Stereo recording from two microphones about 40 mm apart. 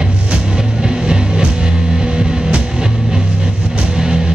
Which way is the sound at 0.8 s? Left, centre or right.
Right.